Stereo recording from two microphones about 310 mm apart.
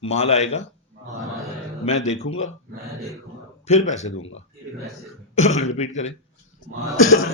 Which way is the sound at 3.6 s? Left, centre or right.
Left.